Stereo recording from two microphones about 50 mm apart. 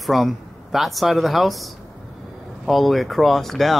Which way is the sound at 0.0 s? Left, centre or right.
Centre.